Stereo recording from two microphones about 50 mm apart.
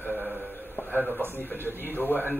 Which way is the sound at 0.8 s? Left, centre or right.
Left.